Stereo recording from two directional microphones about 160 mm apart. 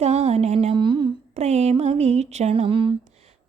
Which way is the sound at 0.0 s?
40° right (ahead or behind).